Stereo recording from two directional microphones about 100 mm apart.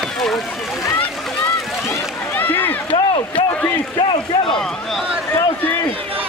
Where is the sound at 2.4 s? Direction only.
20° left (ahead or behind).